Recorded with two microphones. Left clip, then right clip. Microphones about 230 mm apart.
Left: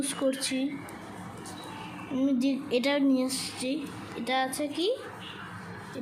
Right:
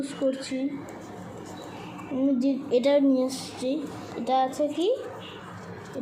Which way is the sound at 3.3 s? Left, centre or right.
Left.